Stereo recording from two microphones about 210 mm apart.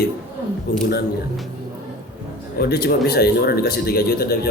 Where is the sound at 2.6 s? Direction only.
50° left (ahead or behind).